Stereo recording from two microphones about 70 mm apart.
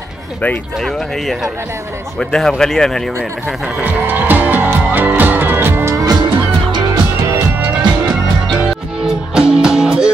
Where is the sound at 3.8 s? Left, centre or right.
Right.